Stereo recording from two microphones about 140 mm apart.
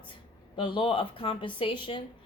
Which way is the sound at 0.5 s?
35° left (ahead or behind).